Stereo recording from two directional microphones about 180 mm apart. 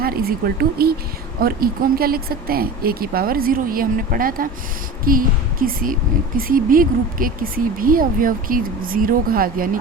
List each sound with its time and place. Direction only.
0.0 s speech: 55° right (ahead or behind)